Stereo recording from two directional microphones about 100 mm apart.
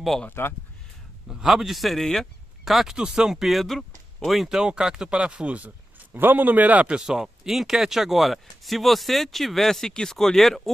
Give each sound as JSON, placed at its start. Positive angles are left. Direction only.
{"t": 0.3, "sound": "speech", "side_deg": 20}
{"t": 1.2, "sound": "speech", "side_deg": -5}